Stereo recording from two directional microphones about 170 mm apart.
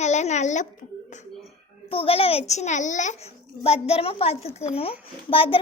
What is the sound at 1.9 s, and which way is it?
A child's voice, 35° left (ahead or behind).